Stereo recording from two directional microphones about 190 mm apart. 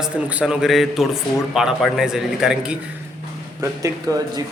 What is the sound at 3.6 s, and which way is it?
Speech, 15° right (ahead or behind).